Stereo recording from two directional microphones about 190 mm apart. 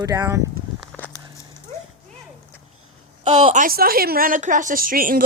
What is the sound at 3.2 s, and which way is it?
A woman's voice, 35° right (ahead or behind).